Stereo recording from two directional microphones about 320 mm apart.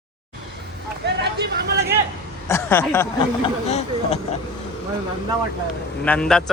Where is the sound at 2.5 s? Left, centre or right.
Centre.